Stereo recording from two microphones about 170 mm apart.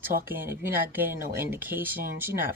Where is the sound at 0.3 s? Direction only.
10° right (ahead or behind).